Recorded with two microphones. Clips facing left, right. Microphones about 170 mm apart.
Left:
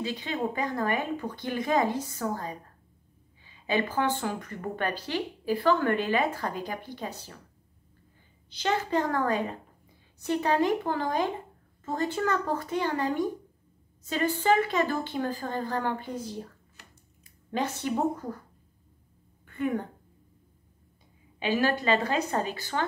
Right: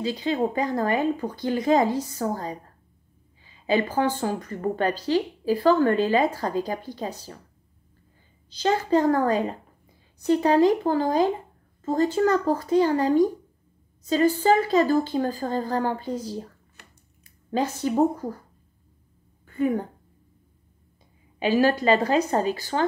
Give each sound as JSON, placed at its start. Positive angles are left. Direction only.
{"t": 0.0, "sound": "speech", "side_deg": -35}
{"t": 3.6, "sound": "speech", "side_deg": -40}
{"t": 8.5, "sound": "speech", "side_deg": -40}
{"t": 17.5, "sound": "speech", "side_deg": -40}
{"t": 19.4, "sound": "a sound", "side_deg": -35}
{"t": 21.4, "sound": "speech", "side_deg": -40}